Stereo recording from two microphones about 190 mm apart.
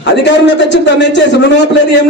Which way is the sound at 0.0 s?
70° left (ahead or behind).